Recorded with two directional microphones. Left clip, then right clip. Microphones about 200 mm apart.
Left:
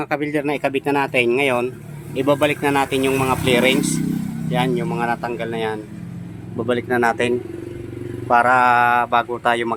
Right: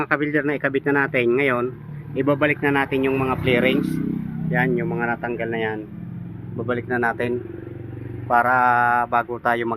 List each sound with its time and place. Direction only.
0.0 s speech: 10° left (ahead or behind)
6.6 s a man's voice: 25° left (ahead or behind); by 9.7 s 10° left (ahead or behind)